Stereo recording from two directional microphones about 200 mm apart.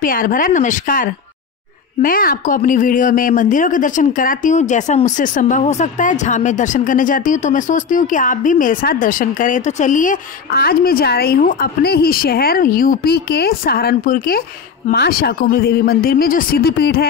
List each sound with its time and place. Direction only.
0.0 s speech: 45° left (ahead or behind)